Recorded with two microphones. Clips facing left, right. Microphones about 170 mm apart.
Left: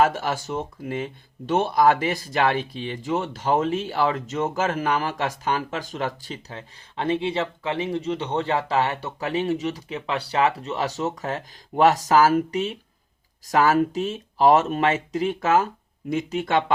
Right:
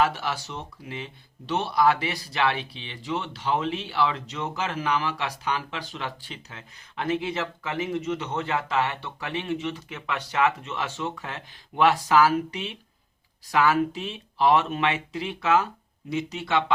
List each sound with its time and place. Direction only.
0.0 s speech: 45° left (ahead or behind)